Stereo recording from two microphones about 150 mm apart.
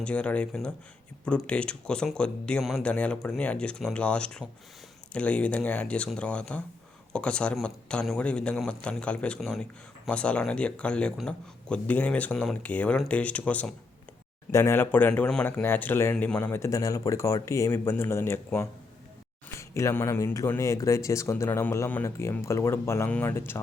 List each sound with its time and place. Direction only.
0.0 s speech: 10° left (ahead or behind)